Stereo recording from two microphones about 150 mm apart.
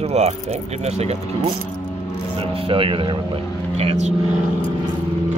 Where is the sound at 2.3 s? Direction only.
35° right (ahead or behind).